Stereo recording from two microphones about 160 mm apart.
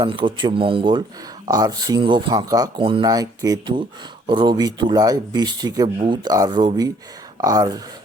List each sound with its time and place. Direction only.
0.0 s speech: 30° right (ahead or behind)